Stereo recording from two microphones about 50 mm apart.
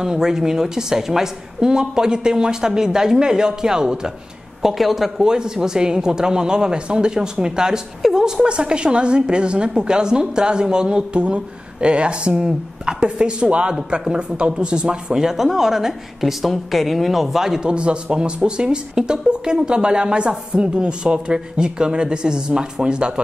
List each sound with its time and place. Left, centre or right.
0.0 s speech: centre
4.6 s a woman's voice: centre
5.2 s a woman's voice: centre